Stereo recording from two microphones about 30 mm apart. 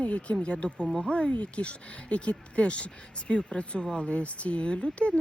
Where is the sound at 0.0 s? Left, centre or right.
Left.